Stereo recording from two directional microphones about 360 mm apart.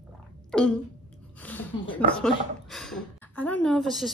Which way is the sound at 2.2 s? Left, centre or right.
Centre.